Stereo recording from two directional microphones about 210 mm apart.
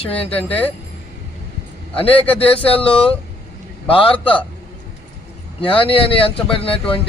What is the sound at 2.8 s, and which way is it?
Speech, 25° left (ahead or behind).